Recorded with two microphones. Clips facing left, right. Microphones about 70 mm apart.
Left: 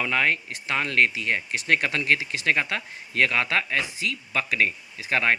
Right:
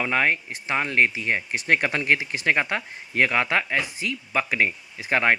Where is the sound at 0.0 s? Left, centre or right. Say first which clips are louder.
Right 1 dB; right.